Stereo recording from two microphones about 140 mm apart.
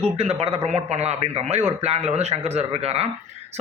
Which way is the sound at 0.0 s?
50° right (ahead or behind).